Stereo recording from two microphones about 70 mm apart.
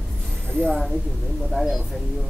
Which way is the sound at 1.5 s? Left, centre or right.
Centre.